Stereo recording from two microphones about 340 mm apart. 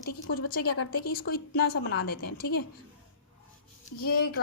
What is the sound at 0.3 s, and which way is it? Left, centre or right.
Speech, left.